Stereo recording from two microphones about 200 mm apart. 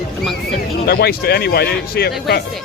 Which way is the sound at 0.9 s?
50° left (ahead or behind).